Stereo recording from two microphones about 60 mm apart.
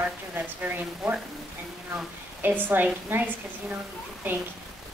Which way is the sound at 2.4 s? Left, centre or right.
Right.